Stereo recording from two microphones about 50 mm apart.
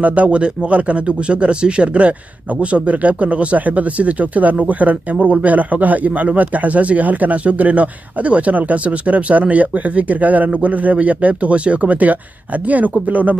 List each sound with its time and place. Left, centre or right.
0.0 s speech: right